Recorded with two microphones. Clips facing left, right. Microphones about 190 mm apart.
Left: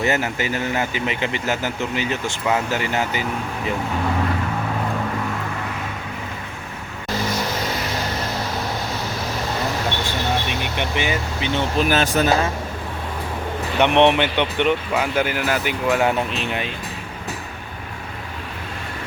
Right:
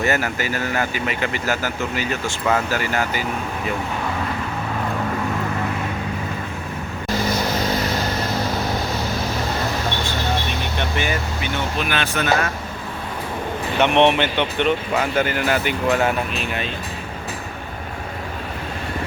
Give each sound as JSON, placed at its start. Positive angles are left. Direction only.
{"t": 0.0, "sound": "speech", "side_deg": 20}
{"t": 10.8, "sound": "a sound", "side_deg": 15}
{"t": 11.8, "sound": "speech", "side_deg": 40}
{"t": 13.7, "sound": "speech", "side_deg": 15}
{"t": 16.0, "sound": "speech", "side_deg": 25}